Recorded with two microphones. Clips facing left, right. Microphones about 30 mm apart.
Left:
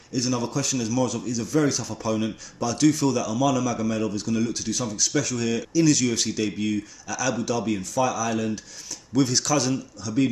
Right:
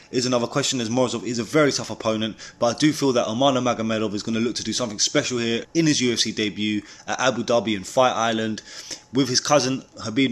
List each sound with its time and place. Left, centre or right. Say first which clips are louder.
0.1 s speech: right 4 dB; right
9.1 s speech: right 3 dB; right